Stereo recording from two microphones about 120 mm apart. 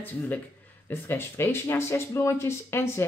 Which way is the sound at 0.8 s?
20° left (ahead or behind).